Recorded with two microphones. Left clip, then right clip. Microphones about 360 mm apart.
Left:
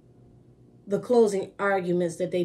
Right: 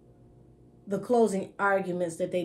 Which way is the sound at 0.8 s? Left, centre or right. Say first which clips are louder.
Left 4 dB; centre.